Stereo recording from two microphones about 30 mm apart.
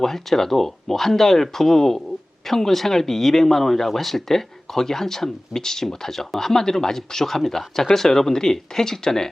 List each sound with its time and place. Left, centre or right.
0.0 s speech: centre